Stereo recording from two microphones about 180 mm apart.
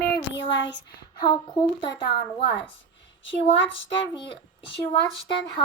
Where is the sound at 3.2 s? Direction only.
90° left.